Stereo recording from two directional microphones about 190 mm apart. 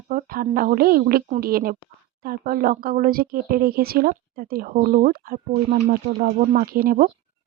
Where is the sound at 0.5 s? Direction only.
50° right (ahead or behind).